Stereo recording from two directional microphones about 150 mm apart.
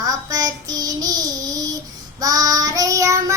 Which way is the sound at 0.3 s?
25° right (ahead or behind).